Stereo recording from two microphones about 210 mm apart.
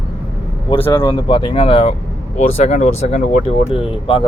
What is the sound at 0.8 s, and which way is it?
Speech, 20° left (ahead or behind).